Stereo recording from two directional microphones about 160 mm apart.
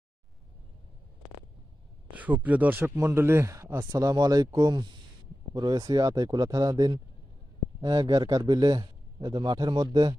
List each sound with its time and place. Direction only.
2.1 s a man's voice: 10° right (ahead or behind); by 10.2 s 25° right (ahead or behind)